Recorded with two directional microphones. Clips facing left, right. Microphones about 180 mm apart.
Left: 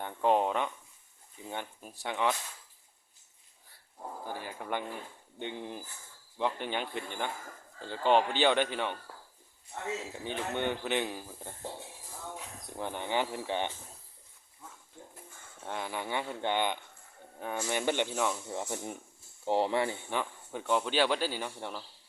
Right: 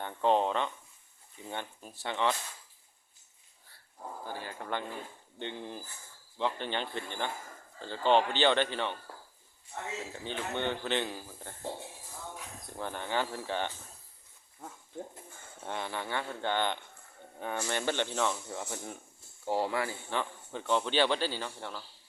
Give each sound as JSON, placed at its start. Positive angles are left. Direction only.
{"t": 0.0, "sound": "speech", "side_deg": 10}
{"t": 4.3, "sound": "speech", "side_deg": 15}
{"t": 10.0, "sound": "speech", "side_deg": 10}
{"t": 12.7, "sound": "speech", "side_deg": 15}
{"t": 15.6, "sound": "speech", "side_deg": 5}
{"t": 18.5, "sound": "speech", "side_deg": 20}
{"t": 20.1, "sound": "speech", "side_deg": 10}